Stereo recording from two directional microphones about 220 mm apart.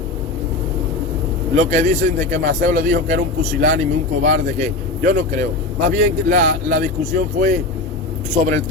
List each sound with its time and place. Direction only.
1.5 s a man's voice: 35° right (ahead or behind)